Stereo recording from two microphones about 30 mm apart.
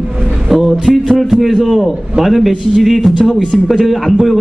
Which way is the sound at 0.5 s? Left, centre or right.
Centre.